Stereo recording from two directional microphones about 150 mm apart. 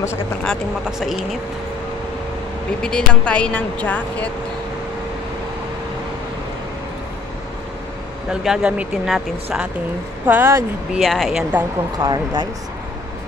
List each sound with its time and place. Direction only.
0.4 s speech: centre (ahead or behind)
2.8 s speech: 5° left (ahead or behind)
8.3 s speech: 5° right (ahead or behind)
10.2 s speech: 15° right (ahead or behind)
11.0 s speech: centre (ahead or behind)
12.0 s speech: 30° right (ahead or behind)